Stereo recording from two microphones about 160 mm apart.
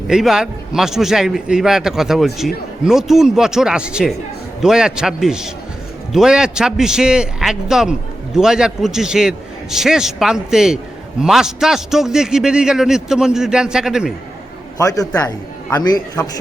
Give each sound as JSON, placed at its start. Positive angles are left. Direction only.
{"t": 0.1, "sound": "a man's voice", "side_deg": -5}
{"t": 14.8, "sound": "a man's voice", "side_deg": 20}